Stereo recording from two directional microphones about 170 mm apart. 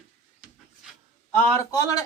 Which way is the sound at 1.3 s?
15° left (ahead or behind).